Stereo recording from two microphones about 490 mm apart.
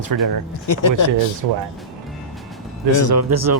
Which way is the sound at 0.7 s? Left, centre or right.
Left.